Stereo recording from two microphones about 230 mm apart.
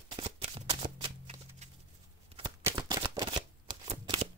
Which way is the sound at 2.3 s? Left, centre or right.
Right.